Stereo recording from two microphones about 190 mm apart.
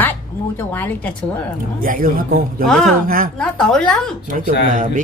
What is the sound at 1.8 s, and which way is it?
Speech, 45° right (ahead or behind).